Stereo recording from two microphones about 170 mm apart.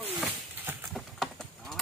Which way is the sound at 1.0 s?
Centre (ahead or behind).